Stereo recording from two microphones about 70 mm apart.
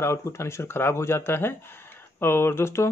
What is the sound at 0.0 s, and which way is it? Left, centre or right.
Speech, left.